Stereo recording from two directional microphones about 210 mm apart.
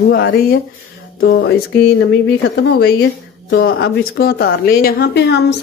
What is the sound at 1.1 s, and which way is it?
A woman's voice, 65° left (ahead or behind).